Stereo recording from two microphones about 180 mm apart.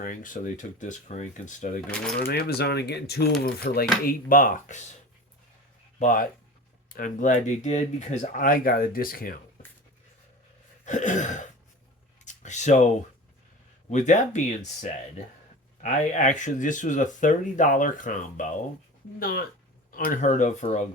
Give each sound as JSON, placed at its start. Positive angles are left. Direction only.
{"t": 0.0, "sound": "speech", "side_deg": 50}
{"t": 2.2, "sound": "speech", "side_deg": 60}
{"t": 6.0, "sound": "speech", "side_deg": 50}
{"t": 10.8, "sound": "speech", "side_deg": 45}
{"t": 12.2, "sound": "a sound", "side_deg": 40}
{"t": 13.9, "sound": "speech", "side_deg": 40}
{"t": 19.2, "sound": "speech", "side_deg": 60}